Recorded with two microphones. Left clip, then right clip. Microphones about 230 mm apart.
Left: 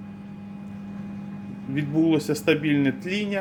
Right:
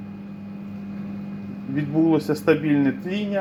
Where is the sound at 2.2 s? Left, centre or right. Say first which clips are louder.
Right 2 dB; centre.